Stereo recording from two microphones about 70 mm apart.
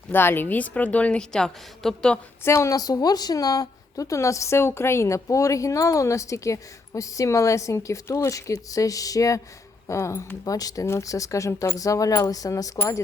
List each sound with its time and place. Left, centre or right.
0.1 s speech: left
1.3 s a woman's voice: centre
2.4 s a woman's voice: left
2.7 s speech: left
9.8 s speech: left
10.4 s coin: left
11.0 s speech: left
11.8 s coin: left